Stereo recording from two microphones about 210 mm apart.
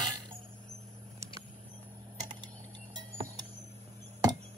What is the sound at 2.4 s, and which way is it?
Vehicle, 20° right (ahead or behind).